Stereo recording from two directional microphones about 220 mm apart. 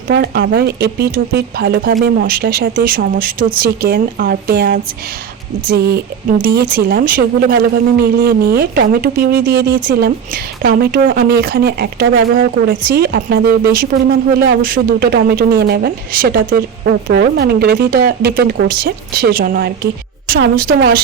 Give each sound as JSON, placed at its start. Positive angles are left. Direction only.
{"t": 0.1, "sound": "a woman's voice", "side_deg": -50}